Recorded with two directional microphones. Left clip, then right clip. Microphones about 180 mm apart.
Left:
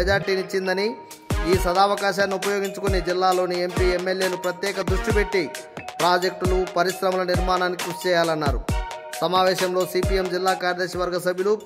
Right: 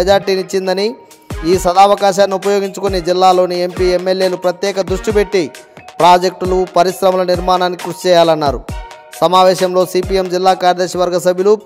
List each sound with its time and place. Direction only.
0.0 s music: 25° right (ahead or behind)
9.2 s speech: 30° right (ahead or behind)
9.8 s music: 30° right (ahead or behind)